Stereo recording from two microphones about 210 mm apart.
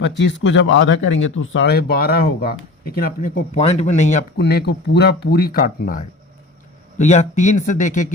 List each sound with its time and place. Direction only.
0.0 s speech: 60° left (ahead or behind); by 4.2 s 35° left (ahead or behind)
4.4 s speech: 50° left (ahead or behind); by 8.1 s 35° left (ahead or behind)